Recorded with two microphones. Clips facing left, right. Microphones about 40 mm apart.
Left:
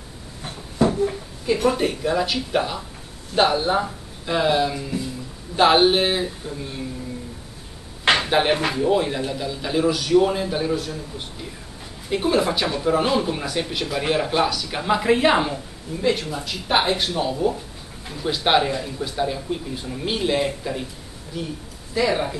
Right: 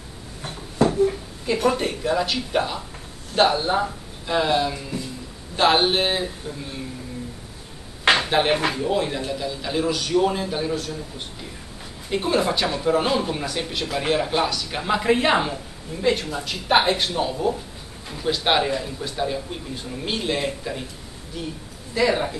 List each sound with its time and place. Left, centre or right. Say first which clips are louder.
0.7 s a sound: even; centre
1.5 s speech: left 1 dB; centre
8.2 s speech: left 1 dB; centre
12.1 s speech: left 1 dB; centre
21.9 s speech: even; centre